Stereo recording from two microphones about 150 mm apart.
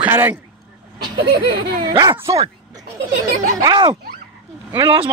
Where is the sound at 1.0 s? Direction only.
90° right.